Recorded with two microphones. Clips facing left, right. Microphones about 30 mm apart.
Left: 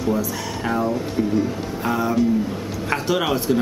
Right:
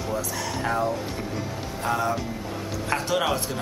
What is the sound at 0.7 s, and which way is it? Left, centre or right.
Speech, centre.